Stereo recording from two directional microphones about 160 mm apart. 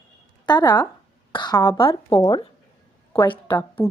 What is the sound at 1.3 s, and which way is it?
Speech, 25° left (ahead or behind).